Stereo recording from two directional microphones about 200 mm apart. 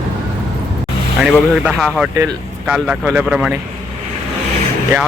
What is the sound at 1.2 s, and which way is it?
Speech, centre (ahead or behind).